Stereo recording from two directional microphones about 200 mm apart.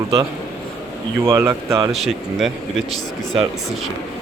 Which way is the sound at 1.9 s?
Centre (ahead or behind).